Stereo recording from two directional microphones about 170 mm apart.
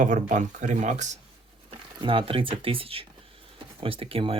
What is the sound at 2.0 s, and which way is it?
Speech, 30° right (ahead or behind).